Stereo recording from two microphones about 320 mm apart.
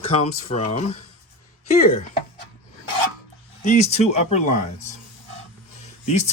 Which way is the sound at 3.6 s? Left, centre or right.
Left.